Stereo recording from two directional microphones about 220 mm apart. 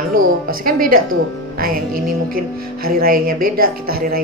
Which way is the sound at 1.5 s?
40° right (ahead or behind).